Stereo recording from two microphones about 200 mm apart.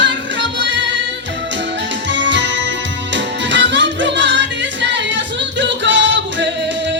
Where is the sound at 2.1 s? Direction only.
65° right (ahead or behind).